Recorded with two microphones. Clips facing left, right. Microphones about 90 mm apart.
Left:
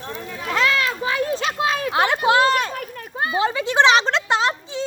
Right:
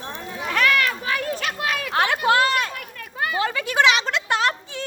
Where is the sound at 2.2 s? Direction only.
25° left (ahead or behind).